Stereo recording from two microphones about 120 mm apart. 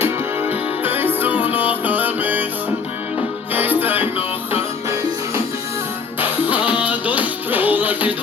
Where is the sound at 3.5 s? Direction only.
15° right (ahead or behind).